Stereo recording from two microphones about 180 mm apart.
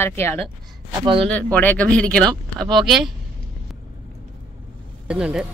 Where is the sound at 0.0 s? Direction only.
15° left (ahead or behind).